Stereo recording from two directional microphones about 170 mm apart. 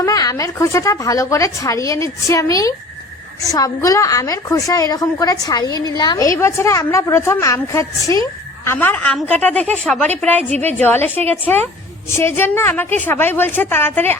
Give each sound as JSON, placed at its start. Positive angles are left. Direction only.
{"t": 0.0, "sound": "a woman's voice", "side_deg": 20}